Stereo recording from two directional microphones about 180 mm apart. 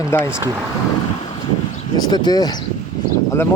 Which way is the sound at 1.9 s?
25° left (ahead or behind).